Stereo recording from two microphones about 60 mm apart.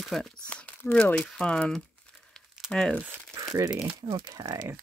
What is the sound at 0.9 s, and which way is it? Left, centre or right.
Speech, centre.